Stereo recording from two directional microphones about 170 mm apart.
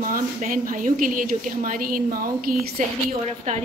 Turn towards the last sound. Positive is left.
turn(degrees=-50)  # may be behind; listen again after turning